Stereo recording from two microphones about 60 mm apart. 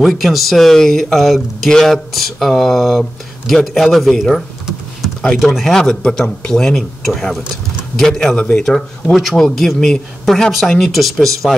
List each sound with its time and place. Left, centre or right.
0.2 s speech: centre
5.0 s a sound: centre
5.4 s speech: centre
8.4 s speech: centre
9.1 s speech: centre